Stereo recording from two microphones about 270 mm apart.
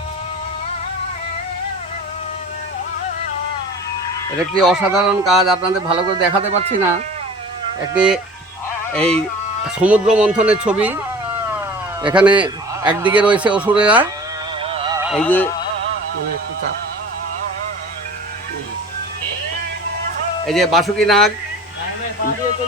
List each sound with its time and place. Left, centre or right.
4.6 s a man's voice: centre
5.8 s a man's voice: right
7.9 s a man's voice: centre
12.1 s a man's voice: centre
14.6 s music: centre
15.1 s a man's voice: centre
20.5 s a man's voice: centre